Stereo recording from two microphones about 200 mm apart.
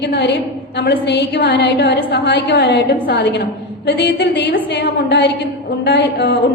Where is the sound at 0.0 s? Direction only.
60° left (ahead or behind).